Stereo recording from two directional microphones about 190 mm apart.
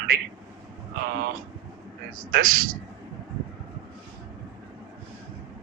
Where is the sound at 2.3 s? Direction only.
50° right (ahead or behind).